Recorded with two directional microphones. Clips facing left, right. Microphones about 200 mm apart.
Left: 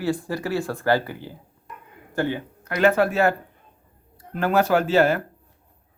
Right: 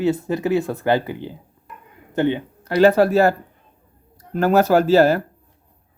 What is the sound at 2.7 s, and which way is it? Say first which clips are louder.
Speech: right 5 dB; 35° right (ahead or behind).